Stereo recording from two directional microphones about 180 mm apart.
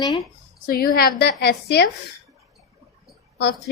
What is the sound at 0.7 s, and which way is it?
Speech, 55° left (ahead or behind).